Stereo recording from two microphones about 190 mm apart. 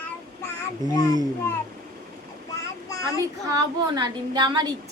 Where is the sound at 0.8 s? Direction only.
20° left (ahead or behind).